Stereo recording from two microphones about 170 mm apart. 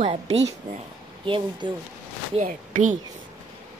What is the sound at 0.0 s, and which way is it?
Speech, 35° right (ahead or behind).